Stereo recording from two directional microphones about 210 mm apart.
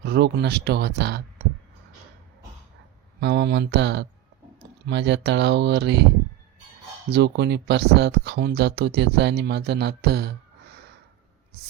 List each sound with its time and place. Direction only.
0.0 s speech: 50° right (ahead or behind)
3.2 s speech: 55° right (ahead or behind)
7.1 s speech: 55° right (ahead or behind)